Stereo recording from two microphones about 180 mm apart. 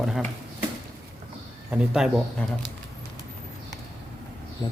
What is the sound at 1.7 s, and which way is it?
Speech, 5° right (ahead or behind).